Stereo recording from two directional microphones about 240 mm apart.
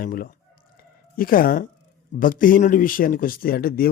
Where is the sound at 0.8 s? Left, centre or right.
Left.